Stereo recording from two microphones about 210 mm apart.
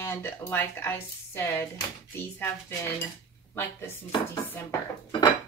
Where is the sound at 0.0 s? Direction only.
10° left (ahead or behind).